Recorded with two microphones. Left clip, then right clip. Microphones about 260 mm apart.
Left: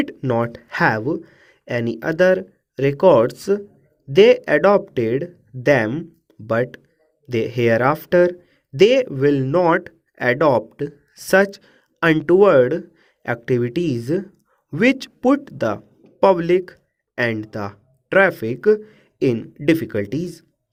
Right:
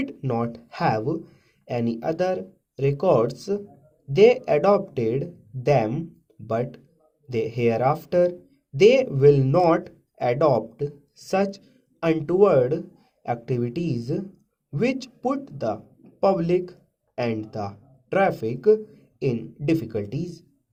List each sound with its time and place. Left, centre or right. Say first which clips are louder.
0.0 s speech: left 6 dB; left